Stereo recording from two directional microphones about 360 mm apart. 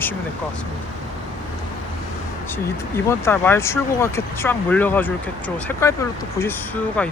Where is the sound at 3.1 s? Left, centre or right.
Centre.